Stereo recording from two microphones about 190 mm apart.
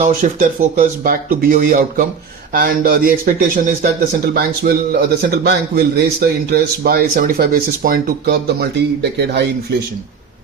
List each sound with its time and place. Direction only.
0.0 s a man's voice: 40° right (ahead or behind); by 9.7 s 60° right (ahead or behind)